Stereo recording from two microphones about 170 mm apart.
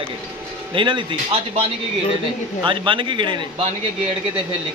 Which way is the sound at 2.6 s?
30° right (ahead or behind).